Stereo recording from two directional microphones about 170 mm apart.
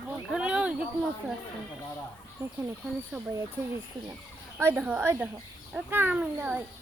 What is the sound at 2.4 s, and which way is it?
Speech, 15° right (ahead or behind).